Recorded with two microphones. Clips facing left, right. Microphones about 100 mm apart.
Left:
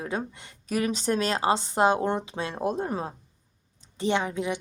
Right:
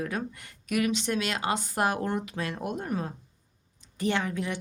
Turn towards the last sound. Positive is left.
turn(degrees=20)  # may be behind; listen again after turning